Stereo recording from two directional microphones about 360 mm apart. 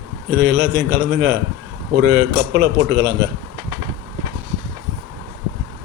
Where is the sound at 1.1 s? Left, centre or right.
Right.